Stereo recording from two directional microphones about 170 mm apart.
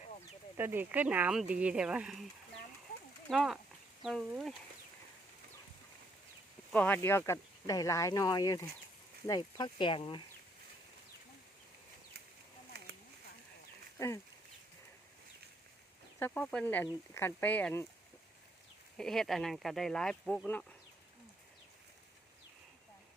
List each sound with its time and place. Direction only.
0.5 s speech: 10° right (ahead or behind)
3.2 s speech: centre (ahead or behind)
6.7 s speech: 10° left (ahead or behind); by 10.2 s 30° left (ahead or behind)
12.7 s a sound: 70° right (ahead or behind)
16.1 s speech: 10° left (ahead or behind)
18.9 s speech: 5° left (ahead or behind)